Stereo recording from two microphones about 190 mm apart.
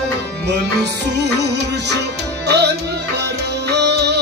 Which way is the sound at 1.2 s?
65° right (ahead or behind).